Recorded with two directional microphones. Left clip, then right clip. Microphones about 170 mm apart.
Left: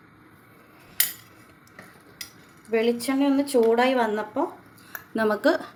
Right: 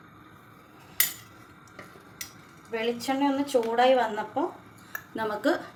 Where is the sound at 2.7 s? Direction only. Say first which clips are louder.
Left 5 dB; 60° left (ahead or behind).